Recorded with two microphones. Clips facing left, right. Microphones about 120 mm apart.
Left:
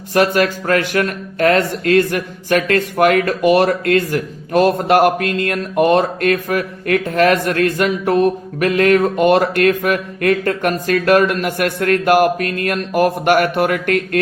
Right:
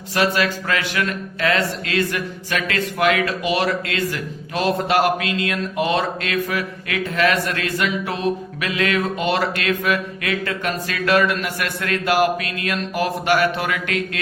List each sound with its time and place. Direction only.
0.1 s mantra: 50° left (ahead or behind)